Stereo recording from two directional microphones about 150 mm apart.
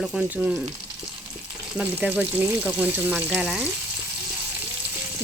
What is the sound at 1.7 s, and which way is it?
Speech, 5° right (ahead or behind).